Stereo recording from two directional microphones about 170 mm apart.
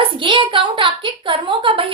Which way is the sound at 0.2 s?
30° right (ahead or behind).